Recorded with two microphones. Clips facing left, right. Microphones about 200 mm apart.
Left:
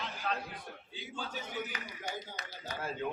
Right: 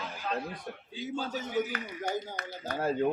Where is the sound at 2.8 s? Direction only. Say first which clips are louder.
Right 9 dB; 40° right (ahead or behind).